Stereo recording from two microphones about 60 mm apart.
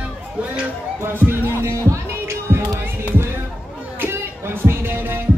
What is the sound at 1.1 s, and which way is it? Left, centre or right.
Music, right.